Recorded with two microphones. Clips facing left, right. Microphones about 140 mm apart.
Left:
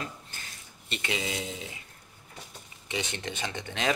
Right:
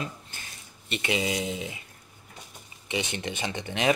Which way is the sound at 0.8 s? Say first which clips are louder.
Right 5 dB; 15° right (ahead or behind).